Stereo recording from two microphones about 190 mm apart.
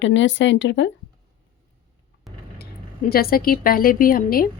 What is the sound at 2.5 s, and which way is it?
Speech, 55° left (ahead or behind).